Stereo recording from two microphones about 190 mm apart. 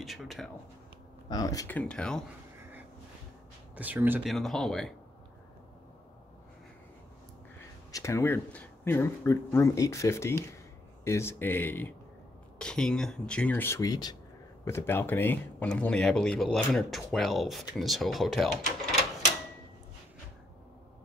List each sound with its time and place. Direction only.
0.0 s speech: centre (ahead or behind)
1.3 s speech: 20° left (ahead or behind)
1.8 s speech: 5° left (ahead or behind)
3.7 s speech: 10° right (ahead or behind)
7.9 s speech: 15° left (ahead or behind)